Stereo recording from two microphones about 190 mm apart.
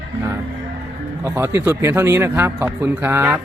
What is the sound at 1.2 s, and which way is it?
A man's voice, 15° right (ahead or behind).